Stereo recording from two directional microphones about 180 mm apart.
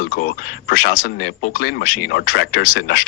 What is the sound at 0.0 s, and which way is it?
Speech, 50° left (ahead or behind).